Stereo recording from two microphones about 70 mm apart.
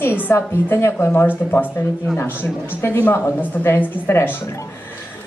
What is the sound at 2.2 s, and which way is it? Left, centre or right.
A woman's voice, left.